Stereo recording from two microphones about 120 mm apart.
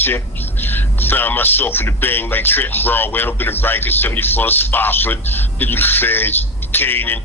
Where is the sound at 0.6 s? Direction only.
15° left (ahead or behind).